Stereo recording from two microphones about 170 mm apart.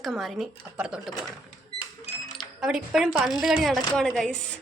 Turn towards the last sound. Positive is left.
turn(degrees=0)  # may be behind; listen again after turning